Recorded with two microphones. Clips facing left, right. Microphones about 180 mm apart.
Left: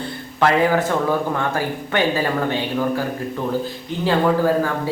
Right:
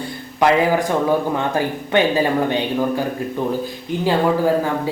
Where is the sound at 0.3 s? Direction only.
15° right (ahead or behind).